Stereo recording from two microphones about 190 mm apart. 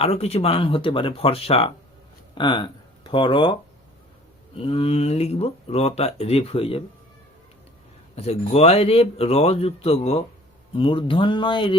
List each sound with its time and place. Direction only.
0.0 s speech: 35° left (ahead or behind)
8.1 s speech: 30° left (ahead or behind)